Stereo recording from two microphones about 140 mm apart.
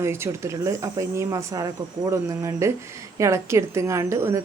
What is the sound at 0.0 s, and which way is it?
A woman's voice, 20° right (ahead or behind).